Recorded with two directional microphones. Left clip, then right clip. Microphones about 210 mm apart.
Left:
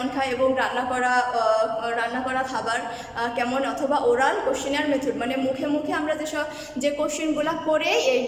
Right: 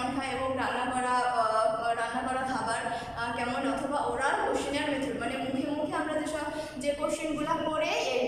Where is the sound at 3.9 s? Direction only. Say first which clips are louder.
Left 10 dB; 40° left (ahead or behind).